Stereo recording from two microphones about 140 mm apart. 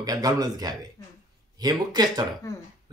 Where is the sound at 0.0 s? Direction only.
25° right (ahead or behind).